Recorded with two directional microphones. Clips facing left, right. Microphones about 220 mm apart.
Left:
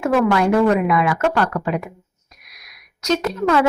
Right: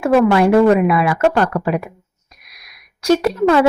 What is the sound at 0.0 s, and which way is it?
A woman's voice, 30° right (ahead or behind).